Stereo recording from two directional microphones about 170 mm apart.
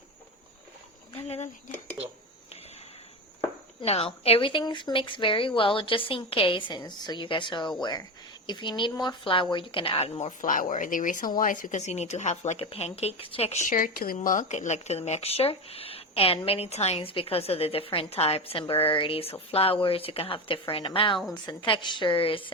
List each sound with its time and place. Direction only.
1.1 s speech: 35° left (ahead or behind)
3.8 s speech: 35° left (ahead or behind)
13.7 s speech: 55° left (ahead or behind)
14.2 s speech: 45° left (ahead or behind)